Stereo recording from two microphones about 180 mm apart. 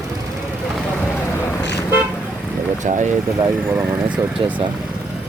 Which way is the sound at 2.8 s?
40° right (ahead or behind).